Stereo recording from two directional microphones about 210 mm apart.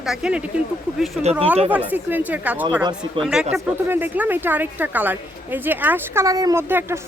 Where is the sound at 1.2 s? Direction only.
30° right (ahead or behind).